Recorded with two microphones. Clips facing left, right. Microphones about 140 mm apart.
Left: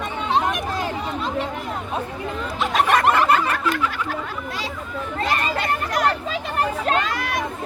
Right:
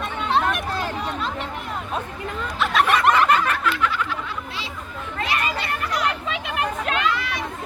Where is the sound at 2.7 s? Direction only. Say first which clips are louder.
Left 1 dB; 45° left (ahead or behind).